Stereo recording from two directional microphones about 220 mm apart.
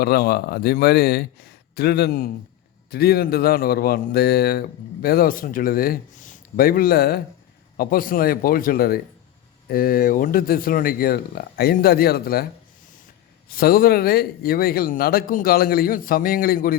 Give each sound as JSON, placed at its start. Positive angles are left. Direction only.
{"t": 0.0, "sound": "a man's voice", "side_deg": 45}
{"t": 13.6, "sound": "a man's voice", "side_deg": 40}